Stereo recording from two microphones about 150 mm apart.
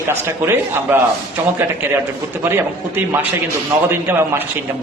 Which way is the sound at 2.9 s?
15° right (ahead or behind).